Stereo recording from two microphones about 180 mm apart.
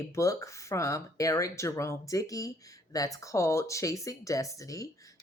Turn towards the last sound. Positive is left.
turn(degrees=20)  # may be behind; listen again after turning